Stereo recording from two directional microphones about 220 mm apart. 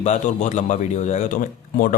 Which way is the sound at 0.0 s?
30° left (ahead or behind).